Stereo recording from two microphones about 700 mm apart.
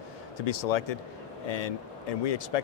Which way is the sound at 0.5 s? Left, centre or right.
Left.